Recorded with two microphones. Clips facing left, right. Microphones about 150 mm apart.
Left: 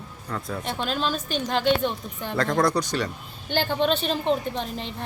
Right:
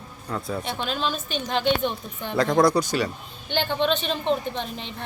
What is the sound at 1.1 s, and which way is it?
Speech, 40° left (ahead or behind).